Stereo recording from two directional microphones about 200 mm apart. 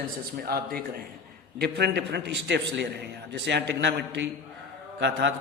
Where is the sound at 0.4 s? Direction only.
50° right (ahead or behind).